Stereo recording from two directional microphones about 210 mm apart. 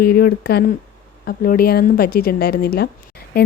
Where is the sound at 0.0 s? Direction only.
45° left (ahead or behind).